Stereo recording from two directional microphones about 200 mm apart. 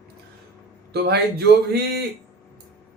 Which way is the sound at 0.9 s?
55° right (ahead or behind).